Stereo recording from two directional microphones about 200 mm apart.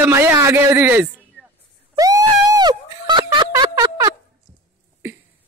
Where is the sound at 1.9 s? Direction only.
20° right (ahead or behind).